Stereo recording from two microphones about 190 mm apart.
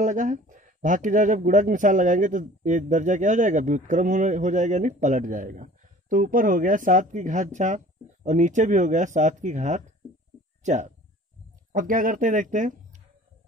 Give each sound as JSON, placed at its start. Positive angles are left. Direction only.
{"t": 0.0, "sound": "speech", "side_deg": -40}